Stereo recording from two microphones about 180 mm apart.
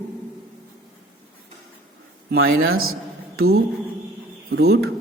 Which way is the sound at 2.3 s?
60° right (ahead or behind).